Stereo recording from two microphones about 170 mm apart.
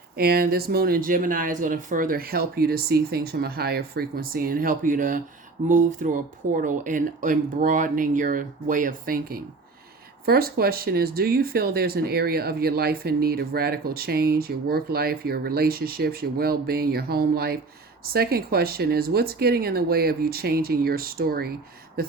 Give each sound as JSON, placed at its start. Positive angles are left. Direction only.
{"t": 0.2, "sound": "speech", "side_deg": -60}